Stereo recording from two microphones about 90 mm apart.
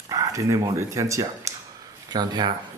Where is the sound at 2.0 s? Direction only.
50° right (ahead or behind).